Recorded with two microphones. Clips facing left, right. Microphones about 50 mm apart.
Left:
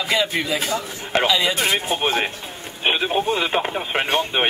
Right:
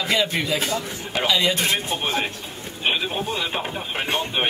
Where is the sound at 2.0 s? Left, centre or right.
Left.